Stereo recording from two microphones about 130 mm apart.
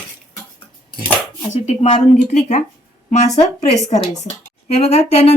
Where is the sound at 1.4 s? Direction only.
60° left (ahead or behind).